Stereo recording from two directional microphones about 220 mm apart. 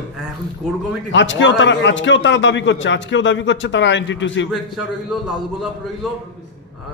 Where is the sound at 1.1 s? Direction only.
55° left (ahead or behind).